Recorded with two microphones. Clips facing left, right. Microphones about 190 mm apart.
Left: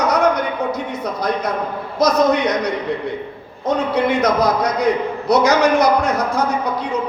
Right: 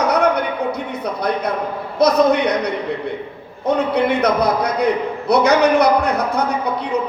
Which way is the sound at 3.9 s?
60° right (ahead or behind).